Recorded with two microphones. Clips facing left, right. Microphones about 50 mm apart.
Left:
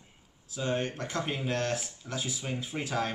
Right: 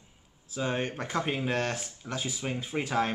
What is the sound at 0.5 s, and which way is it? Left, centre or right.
Speech, centre.